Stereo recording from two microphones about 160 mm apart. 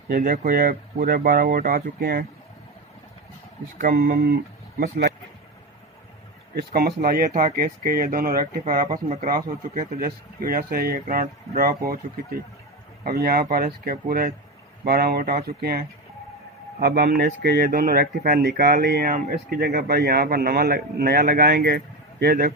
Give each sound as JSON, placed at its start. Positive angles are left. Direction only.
{"t": 0.1, "sound": "speech", "side_deg": -65}
{"t": 3.8, "sound": "speech", "side_deg": -60}
{"t": 4.8, "sound": "speech", "side_deg": -80}
{"t": 6.5, "sound": "speech", "side_deg": -85}
{"t": 7.0, "sound": "speech", "side_deg": -65}
{"t": 13.1, "sound": "speech", "side_deg": -70}
{"t": 16.8, "sound": "speech", "side_deg": -85}